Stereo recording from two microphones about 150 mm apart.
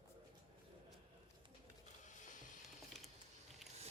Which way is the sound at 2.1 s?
60° left (ahead or behind).